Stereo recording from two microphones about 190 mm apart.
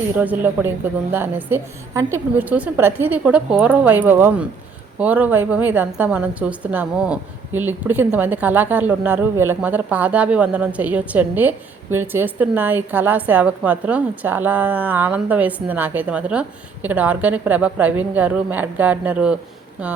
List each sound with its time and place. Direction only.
0.2 s a woman's voice: 10° right (ahead or behind)